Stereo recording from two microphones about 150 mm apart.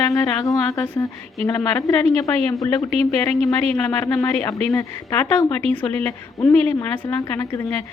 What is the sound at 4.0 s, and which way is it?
A woman's voice, 15° left (ahead or behind).